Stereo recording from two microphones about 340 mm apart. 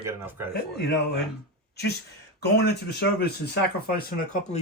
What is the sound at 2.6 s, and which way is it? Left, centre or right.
Speech, left.